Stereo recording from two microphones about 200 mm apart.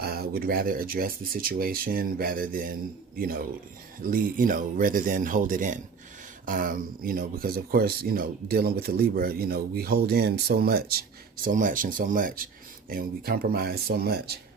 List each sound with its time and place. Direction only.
0.0 s speech: 50° right (ahead or behind)